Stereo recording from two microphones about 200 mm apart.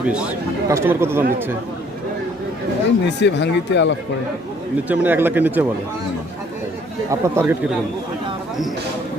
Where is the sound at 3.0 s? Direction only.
60° left (ahead or behind).